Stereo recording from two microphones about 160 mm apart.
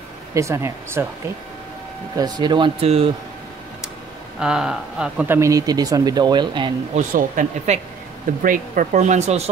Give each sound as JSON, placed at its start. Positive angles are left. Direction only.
{"t": 0.3, "sound": "speech", "side_deg": -20}
{"t": 2.1, "sound": "speech", "side_deg": -25}
{"t": 4.4, "sound": "speech", "side_deg": -5}
{"t": 5.4, "sound": "speech", "side_deg": -20}
{"t": 7.0, "sound": "speech", "side_deg": -55}